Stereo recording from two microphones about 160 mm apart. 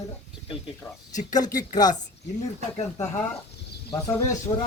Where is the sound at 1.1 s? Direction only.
50° left (ahead or behind).